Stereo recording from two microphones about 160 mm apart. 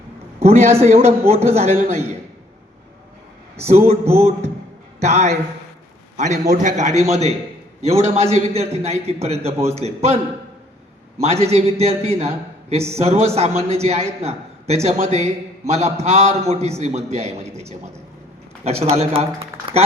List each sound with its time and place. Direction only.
0.3 s a man's voice: 40° right (ahead or behind)
3.7 s a man's voice: 40° right (ahead or behind)
11.2 s a man's voice: 40° right (ahead or behind)